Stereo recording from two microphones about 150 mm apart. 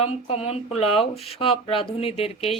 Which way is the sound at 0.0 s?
40° left (ahead or behind).